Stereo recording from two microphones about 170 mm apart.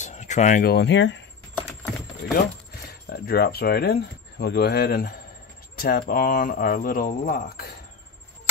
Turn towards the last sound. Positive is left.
turn(degrees=60)  # may be behind; listen again after turning